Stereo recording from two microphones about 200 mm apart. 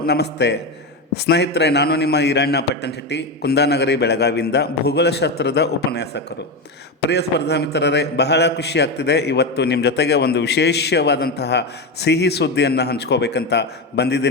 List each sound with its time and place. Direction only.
0.0 s a man's voice: 55° left (ahead or behind)